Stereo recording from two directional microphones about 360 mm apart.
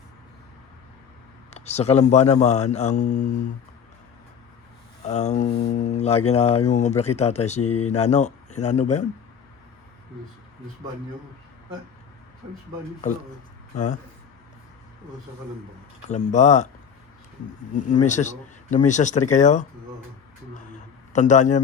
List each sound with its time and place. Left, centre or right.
1.5 s speech: centre
5.0 s speech: centre
16.0 s speech: centre
17.7 s speech: centre
21.1 s speech: centre